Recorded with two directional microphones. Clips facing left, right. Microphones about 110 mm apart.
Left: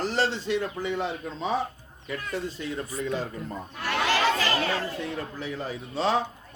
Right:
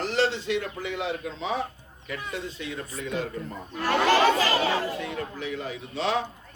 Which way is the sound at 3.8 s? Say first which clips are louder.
Right 5 dB; 40° right (ahead or behind).